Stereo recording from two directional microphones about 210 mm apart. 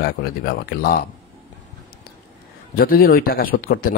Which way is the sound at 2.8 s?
45° left (ahead or behind).